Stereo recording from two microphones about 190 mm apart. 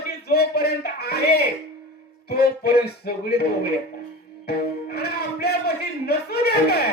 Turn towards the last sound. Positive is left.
turn(degrees=55)  # may be behind; listen again after turning